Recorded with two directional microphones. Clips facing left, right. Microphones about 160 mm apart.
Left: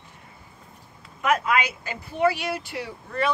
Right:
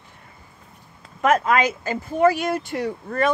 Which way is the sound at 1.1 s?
45° right (ahead or behind).